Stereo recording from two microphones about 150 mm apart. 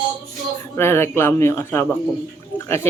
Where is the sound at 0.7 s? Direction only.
15° left (ahead or behind).